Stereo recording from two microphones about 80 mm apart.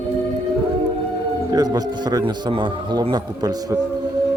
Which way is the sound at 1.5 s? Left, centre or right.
Right.